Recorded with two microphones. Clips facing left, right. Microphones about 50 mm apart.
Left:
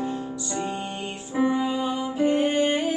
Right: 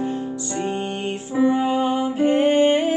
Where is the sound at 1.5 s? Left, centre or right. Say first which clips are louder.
Right 5 dB; right.